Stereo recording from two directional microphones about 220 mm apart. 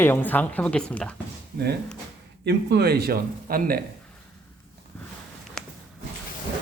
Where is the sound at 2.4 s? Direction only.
45° right (ahead or behind).